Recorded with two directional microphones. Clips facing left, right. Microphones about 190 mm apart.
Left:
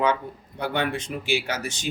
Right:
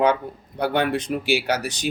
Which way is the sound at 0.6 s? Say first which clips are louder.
Right 5 dB; 40° right (ahead or behind).